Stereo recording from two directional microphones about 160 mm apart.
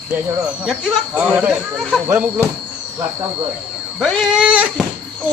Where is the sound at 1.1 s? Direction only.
10° right (ahead or behind).